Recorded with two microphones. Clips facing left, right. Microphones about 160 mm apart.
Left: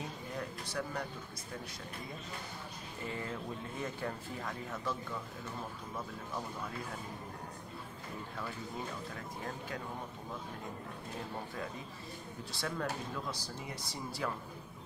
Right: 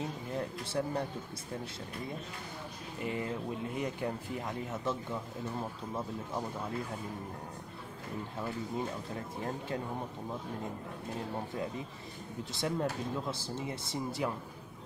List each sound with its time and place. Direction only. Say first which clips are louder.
0.4 s speech: right 5 dB; 25° right (ahead or behind)
3.0 s speech: right 5 dB; 15° right (ahead or behind)
12.5 s speech: right 4 dB; 20° right (ahead or behind)